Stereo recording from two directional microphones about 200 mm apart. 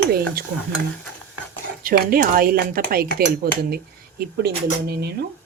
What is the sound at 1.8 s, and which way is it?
A woman's voice, 45° right (ahead or behind).